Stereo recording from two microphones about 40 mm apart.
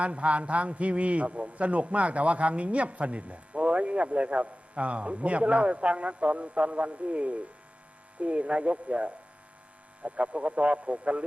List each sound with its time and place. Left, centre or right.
0.0 s a man's voice: right